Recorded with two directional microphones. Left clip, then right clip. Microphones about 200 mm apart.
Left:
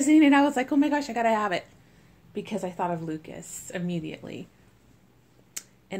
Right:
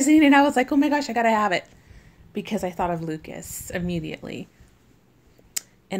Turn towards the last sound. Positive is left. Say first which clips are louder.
# right 7 dB
turn(degrees=-40)  # may be behind; listen again after turning